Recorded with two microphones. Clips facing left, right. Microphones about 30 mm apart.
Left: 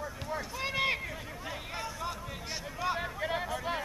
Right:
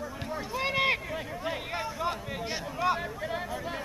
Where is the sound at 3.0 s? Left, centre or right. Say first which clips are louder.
Even; centre.